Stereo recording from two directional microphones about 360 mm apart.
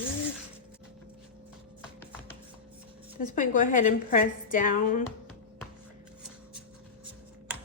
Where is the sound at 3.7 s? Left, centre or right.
Left.